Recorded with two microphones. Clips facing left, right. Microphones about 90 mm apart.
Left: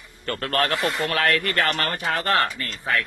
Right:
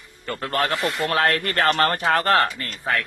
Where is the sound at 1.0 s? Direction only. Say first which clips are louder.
Right 3 dB; 30° right (ahead or behind).